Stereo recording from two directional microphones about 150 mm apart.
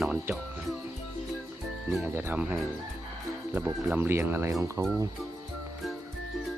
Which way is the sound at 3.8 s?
10° right (ahead or behind).